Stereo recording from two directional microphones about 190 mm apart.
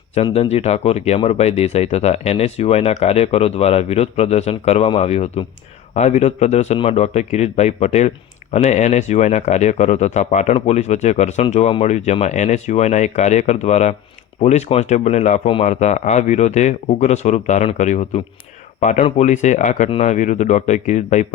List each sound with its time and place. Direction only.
0.2 s speech: 30° left (ahead or behind)